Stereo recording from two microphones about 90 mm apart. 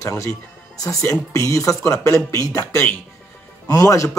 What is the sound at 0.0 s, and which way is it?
A man's voice, 35° left (ahead or behind).